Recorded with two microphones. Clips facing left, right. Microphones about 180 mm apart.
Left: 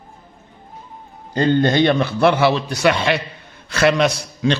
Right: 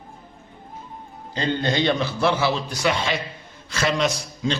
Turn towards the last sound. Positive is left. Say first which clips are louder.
# left 5 dB
turn(degrees=65)  # may be behind; listen again after turning